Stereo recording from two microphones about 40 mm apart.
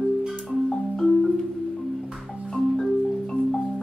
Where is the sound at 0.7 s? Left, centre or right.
Centre.